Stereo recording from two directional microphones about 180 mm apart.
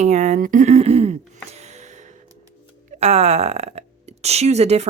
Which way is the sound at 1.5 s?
40° right (ahead or behind).